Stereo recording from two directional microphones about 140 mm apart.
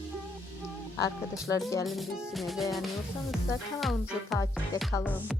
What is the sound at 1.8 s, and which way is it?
Speech, centre (ahead or behind).